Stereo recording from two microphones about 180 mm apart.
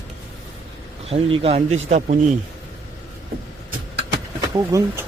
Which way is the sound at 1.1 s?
35° right (ahead or behind).